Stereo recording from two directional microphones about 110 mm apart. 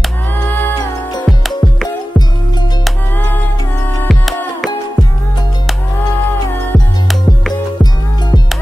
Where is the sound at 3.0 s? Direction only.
15° left (ahead or behind).